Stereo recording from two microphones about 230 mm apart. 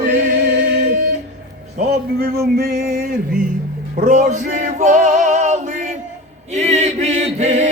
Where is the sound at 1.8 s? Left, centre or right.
Right.